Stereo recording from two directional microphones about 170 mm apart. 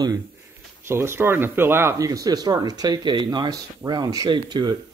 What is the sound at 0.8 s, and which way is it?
Speech, 15° right (ahead or behind).